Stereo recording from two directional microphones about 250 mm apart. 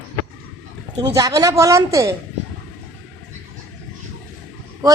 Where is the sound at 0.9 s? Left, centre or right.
Centre.